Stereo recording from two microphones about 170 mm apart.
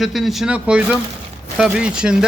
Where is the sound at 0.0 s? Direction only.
Centre (ahead or behind).